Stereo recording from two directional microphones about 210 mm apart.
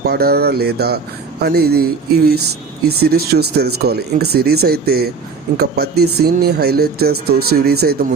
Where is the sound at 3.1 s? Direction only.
50° right (ahead or behind).